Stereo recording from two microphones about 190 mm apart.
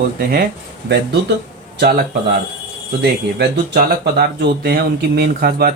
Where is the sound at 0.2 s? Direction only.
50° right (ahead or behind).